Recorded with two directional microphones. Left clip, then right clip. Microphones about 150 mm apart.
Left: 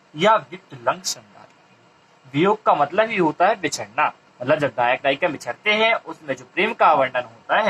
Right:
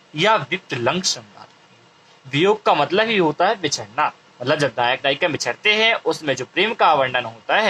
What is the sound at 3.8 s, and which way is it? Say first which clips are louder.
Speech: even; 25° right (ahead or behind).